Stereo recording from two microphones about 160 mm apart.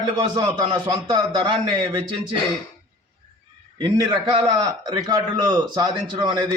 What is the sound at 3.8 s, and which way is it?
A man's voice, 30° right (ahead or behind).